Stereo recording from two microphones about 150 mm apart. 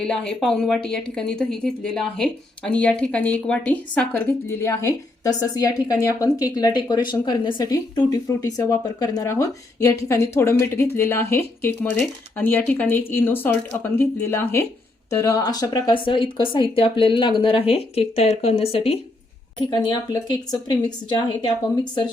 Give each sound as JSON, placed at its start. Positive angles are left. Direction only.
{"t": 0.0, "sound": "a woman's voice", "side_deg": 5}
{"t": 19.5, "sound": "a woman's voice", "side_deg": 30}